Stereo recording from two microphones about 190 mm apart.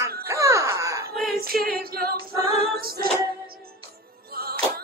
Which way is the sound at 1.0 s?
50° right (ahead or behind).